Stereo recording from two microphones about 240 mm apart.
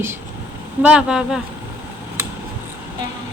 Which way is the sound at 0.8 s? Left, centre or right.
Centre.